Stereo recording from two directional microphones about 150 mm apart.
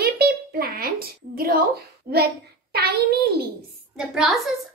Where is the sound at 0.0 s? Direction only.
90° right.